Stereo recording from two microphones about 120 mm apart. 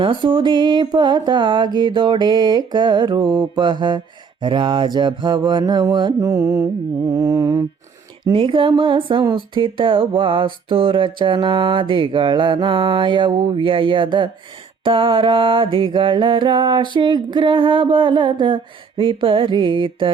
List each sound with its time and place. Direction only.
0.0 s mantra: 45° right (ahead or behind)
6.1 s mantra: 25° right (ahead or behind)
8.2 s music: 45° right (ahead or behind)